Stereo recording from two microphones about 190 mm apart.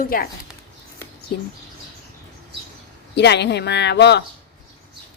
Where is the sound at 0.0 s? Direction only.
50° left (ahead or behind).